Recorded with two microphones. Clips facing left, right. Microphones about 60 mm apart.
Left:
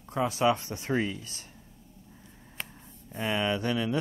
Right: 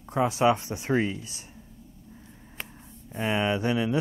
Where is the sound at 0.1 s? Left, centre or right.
Right.